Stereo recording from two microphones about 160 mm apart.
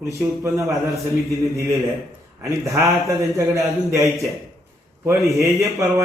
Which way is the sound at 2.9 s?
20° right (ahead or behind).